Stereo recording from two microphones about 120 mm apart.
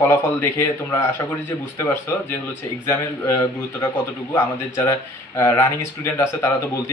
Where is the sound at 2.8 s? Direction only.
20° left (ahead or behind).